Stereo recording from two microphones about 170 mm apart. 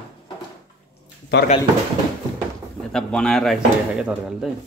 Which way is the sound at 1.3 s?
90° left.